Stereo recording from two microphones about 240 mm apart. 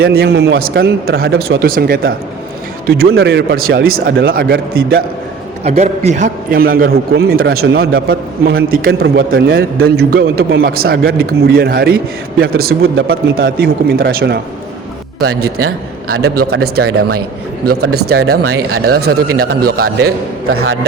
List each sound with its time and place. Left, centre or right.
0.0 s a man's voice: right
5.6 s a man's voice: right
15.4 s a man's voice: right
16.5 s a man's voice: right
18.3 s a man's voice: right
18.9 s a man's voice: right